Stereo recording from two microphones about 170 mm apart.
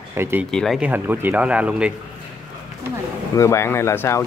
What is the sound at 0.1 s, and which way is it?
Speech, 15° right (ahead or behind).